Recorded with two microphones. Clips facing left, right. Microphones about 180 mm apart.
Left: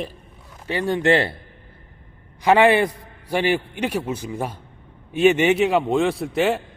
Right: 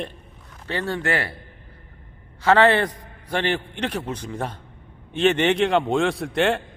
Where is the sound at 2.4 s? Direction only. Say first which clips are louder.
Left 2 dB; 15° left (ahead or behind).